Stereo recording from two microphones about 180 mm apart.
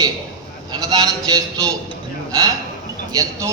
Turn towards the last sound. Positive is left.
turn(degrees=-20)  # may be behind; listen again after turning